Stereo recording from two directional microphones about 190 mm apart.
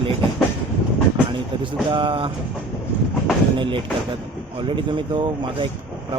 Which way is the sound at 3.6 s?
25° right (ahead or behind).